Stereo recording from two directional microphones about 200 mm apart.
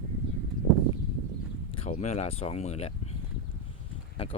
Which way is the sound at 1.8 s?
35° left (ahead or behind).